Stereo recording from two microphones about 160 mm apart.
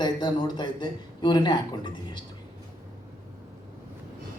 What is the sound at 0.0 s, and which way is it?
Speech, 25° left (ahead or behind).